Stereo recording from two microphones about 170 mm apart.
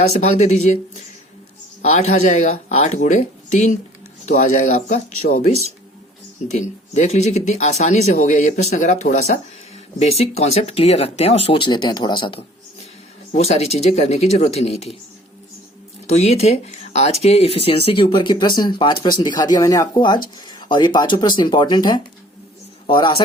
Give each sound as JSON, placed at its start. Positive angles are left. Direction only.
{"t": 0.1, "sound": "speech", "side_deg": 40}
{"t": 1.8, "sound": "speech", "side_deg": 40}
{"t": 16.0, "sound": "speech", "side_deg": 40}